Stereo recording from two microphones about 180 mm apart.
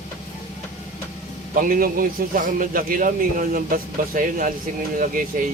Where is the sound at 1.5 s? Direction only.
50° right (ahead or behind).